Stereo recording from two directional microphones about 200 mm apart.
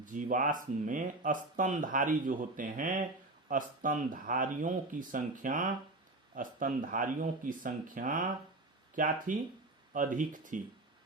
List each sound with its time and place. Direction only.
0.0 s speech: 40° right (ahead or behind)